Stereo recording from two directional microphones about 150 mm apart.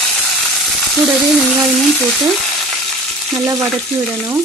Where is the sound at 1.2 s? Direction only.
Centre (ahead or behind).